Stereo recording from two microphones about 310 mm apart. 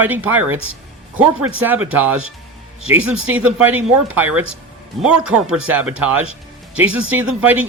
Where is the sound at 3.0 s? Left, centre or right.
Right.